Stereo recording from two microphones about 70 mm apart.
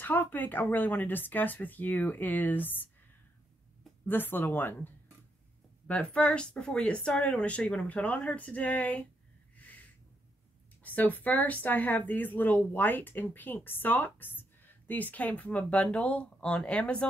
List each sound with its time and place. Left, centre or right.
0.0 s speech: left
4.0 s speech: left
5.9 s speech: centre
10.8 s speech: left